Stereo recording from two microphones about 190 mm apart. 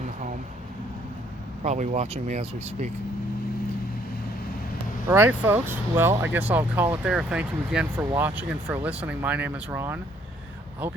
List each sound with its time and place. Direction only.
1.6 s speech: 40° right (ahead or behind)
5.0 s speech: 10° right (ahead or behind)